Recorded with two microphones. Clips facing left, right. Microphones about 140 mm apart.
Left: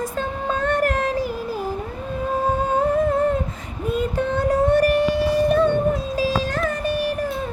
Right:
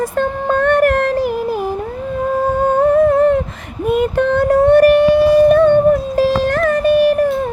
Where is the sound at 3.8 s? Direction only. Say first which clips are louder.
Right 8 dB; 70° right (ahead or behind).